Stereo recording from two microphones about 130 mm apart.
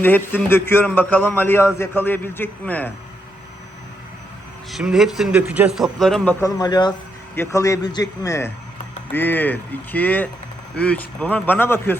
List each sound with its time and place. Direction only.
0.0 s a man's voice: 15° left (ahead or behind)
4.7 s a man's voice: 5° right (ahead or behind)
6.4 s a man's voice: 30° left (ahead or behind); by 11.9 s 15° left (ahead or behind)